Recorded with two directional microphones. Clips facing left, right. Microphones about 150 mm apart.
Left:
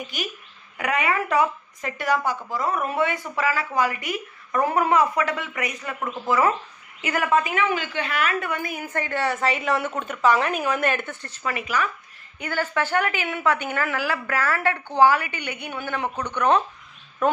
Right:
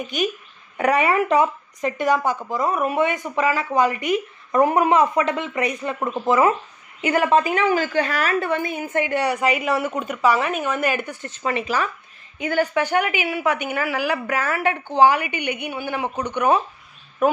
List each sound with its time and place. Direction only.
0.0 s a woman's voice: 20° right (ahead or behind); by 11.1 s 5° right (ahead or behind)
11.1 s speech: 20° right (ahead or behind)
12.4 s a woman's voice: 15° right (ahead or behind)